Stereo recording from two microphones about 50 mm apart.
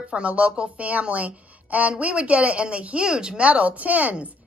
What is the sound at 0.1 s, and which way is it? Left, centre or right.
A woman's voice, right.